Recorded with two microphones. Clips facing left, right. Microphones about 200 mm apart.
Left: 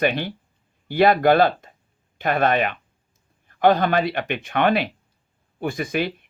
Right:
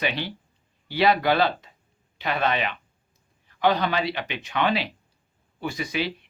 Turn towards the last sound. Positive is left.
turn(degrees=50)  # may be behind; listen again after turning